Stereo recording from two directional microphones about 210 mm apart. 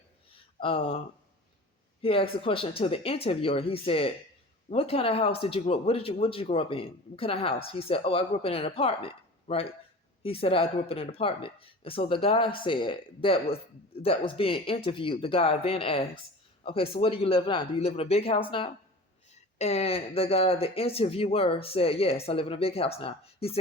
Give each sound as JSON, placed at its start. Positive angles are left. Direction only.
{"t": 0.6, "sound": "speech", "side_deg": 25}
{"t": 2.0, "sound": "speech", "side_deg": 25}